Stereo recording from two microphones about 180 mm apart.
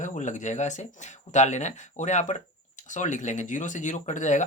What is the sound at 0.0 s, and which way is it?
Speech, 45° left (ahead or behind).